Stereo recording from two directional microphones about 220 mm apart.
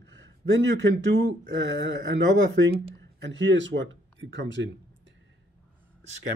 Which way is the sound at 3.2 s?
55° right (ahead or behind).